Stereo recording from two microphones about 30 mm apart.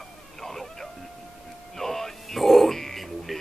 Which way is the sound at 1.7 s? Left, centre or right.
Centre.